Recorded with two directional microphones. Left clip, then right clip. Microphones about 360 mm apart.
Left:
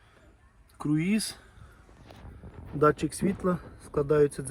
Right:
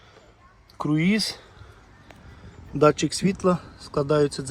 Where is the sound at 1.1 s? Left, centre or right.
Centre.